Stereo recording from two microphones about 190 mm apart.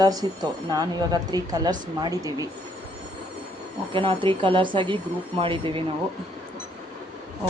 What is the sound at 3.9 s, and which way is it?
Speech, 25° right (ahead or behind).